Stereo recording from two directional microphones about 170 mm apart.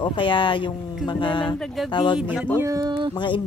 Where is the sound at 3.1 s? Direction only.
30° left (ahead or behind).